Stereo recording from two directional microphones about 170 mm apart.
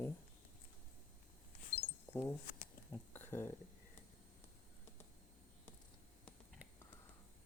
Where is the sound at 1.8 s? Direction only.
10° left (ahead or behind).